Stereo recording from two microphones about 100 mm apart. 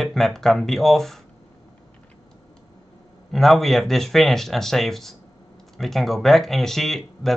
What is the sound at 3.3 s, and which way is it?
Speech, centre (ahead or behind).